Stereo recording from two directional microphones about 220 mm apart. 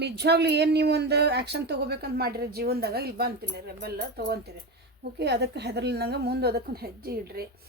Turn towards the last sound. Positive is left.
turn(degrees=-45)  # may be behind; listen again after turning